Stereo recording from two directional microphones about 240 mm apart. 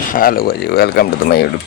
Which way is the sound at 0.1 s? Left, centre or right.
Left.